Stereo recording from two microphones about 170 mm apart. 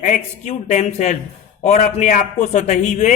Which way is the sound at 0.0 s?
45° left (ahead or behind).